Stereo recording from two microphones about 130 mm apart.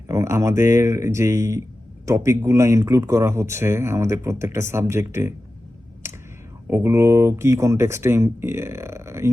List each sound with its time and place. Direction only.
0.1 s speech: 20° right (ahead or behind)
6.7 s speech: 20° right (ahead or behind)